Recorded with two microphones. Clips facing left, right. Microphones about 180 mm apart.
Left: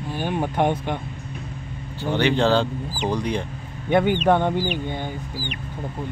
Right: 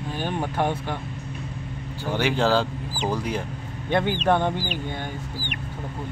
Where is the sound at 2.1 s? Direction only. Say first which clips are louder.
Left 3 dB; 5° right (ahead or behind).